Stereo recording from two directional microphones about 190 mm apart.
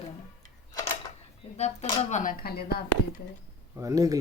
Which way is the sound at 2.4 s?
55° left (ahead or behind).